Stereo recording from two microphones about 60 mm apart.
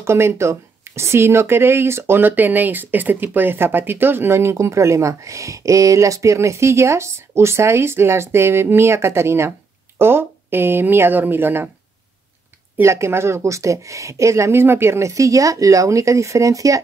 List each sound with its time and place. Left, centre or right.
0.0 s speech: right
12.8 s speech: right